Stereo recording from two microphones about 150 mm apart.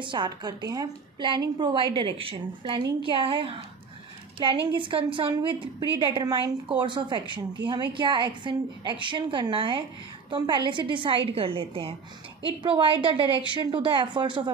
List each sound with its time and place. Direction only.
0.0 s a woman's voice: 30° right (ahead or behind)